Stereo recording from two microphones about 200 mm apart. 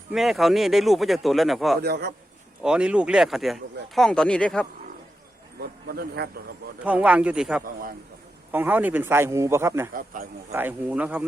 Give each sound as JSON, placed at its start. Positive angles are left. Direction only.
{"t": 0.1, "sound": "speech", "side_deg": 0}
{"t": 1.8, "sound": "speech", "side_deg": -55}
{"t": 2.6, "sound": "speech", "side_deg": -5}
{"t": 5.5, "sound": "speech", "side_deg": -50}
{"t": 6.8, "sound": "speech", "side_deg": -5}
{"t": 7.6, "sound": "speech", "side_deg": -45}
{"t": 8.5, "sound": "speech", "side_deg": -10}
{"t": 9.9, "sound": "speech", "side_deg": -45}
{"t": 10.5, "sound": "speech", "side_deg": -10}